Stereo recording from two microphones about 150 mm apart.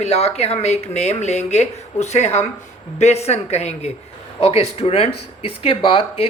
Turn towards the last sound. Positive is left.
turn(degrees=40)  # may be behind; listen again after turning